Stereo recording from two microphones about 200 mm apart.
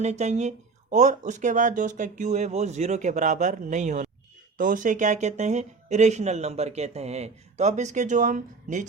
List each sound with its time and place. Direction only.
0.0 s speech: 35° right (ahead or behind)